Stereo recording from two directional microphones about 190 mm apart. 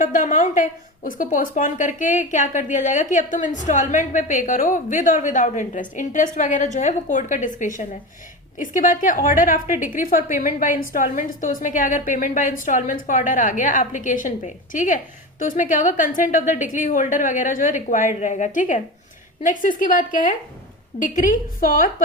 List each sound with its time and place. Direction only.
0.0 s a woman's voice: 40° left (ahead or behind)